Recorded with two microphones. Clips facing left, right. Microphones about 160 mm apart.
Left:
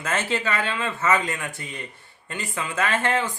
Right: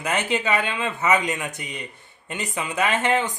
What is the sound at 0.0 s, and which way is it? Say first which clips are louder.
Speech: right 2 dB; 15° right (ahead or behind).